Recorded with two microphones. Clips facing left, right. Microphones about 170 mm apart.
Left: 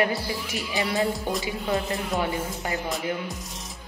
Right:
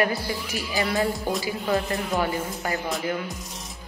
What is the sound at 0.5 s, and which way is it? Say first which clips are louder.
Speech: right 1 dB; centre (ahead or behind).